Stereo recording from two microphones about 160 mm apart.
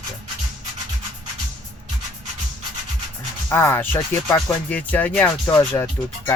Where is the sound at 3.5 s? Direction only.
15° left (ahead or behind).